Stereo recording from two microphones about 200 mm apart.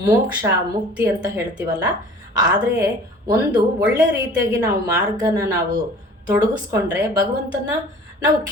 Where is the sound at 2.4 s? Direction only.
15° right (ahead or behind).